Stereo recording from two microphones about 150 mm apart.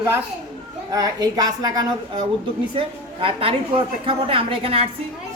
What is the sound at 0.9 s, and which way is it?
A woman's voice, 25° right (ahead or behind).